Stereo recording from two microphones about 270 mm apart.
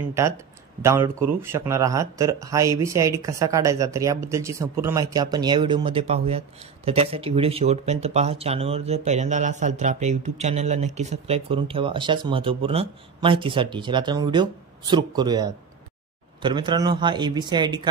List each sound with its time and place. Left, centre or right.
0.8 s speech: centre